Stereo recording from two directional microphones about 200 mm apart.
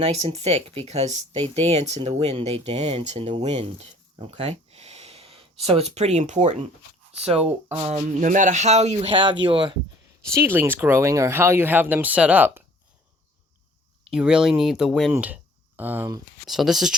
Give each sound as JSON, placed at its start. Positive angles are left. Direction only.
{"t": 0.0, "sound": "speech", "side_deg": -30}
{"t": 7.7, "sound": "speech", "side_deg": -35}
{"t": 14.1, "sound": "speech", "side_deg": -5}
{"t": 16.5, "sound": "speech", "side_deg": 0}